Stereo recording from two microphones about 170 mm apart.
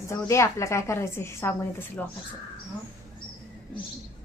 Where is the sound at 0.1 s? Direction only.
15° left (ahead or behind).